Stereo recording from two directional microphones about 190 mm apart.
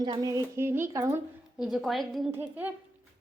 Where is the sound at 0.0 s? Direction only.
20° right (ahead or behind).